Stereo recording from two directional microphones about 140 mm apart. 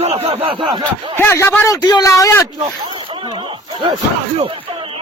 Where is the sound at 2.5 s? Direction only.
35° right (ahead or behind).